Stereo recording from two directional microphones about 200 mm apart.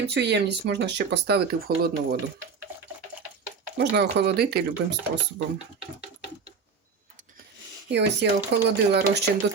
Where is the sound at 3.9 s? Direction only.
55° right (ahead or behind).